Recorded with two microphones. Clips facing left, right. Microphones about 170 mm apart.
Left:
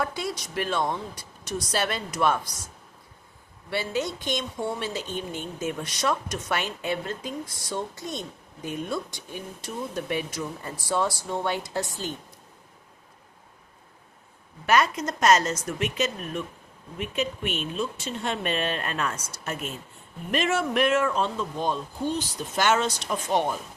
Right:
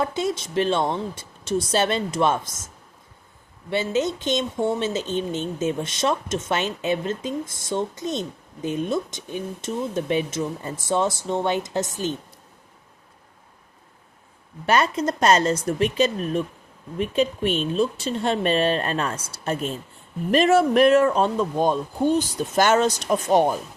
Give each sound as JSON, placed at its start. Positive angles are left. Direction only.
{"t": 0.0, "sound": "speech", "side_deg": -25}
{"t": 3.7, "sound": "speech", "side_deg": -20}
{"t": 14.7, "sound": "speech", "side_deg": -30}